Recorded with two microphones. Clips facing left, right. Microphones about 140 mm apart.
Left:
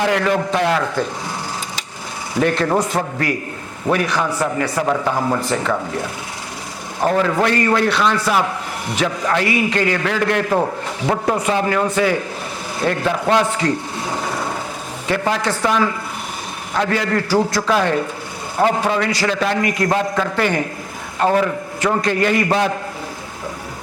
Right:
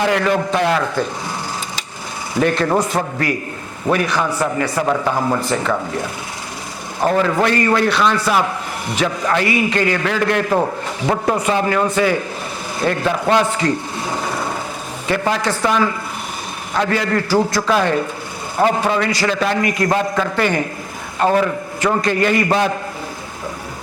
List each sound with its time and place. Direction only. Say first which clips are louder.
0.0 s a man's voice: right 1 dB; 15° right (ahead or behind)
2.4 s a man's voice: right 1 dB; 15° right (ahead or behind)
4.3 s a man's voice: right 1 dB; 25° right (ahead or behind)
5.5 s a man's voice: right 1 dB; 20° right (ahead or behind)
14.1 s wood: right 1 dB; 25° right (ahead or behind)
15.0 s a man's voice: right 1 dB; 15° right (ahead or behind)